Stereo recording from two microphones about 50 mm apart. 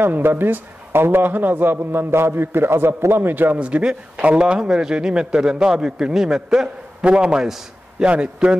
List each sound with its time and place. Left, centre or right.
0.0 s a man's voice: right
3.5 s a man's voice: right